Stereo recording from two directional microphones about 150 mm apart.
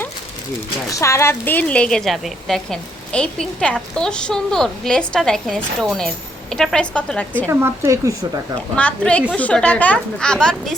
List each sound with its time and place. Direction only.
0.9 s speech: 20° left (ahead or behind)
7.4 s a woman's voice: 15° right (ahead or behind)
8.7 s a woman's voice: 10° left (ahead or behind)